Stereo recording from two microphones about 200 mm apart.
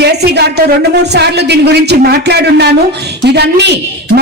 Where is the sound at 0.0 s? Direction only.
55° right (ahead or behind).